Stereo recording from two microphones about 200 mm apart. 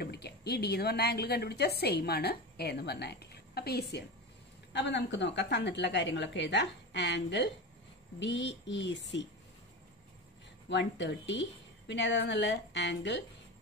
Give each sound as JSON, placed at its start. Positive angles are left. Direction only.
{"t": 0.0, "sound": "a woman's voice", "side_deg": 55}
{"t": 10.7, "sound": "a woman's voice", "side_deg": 60}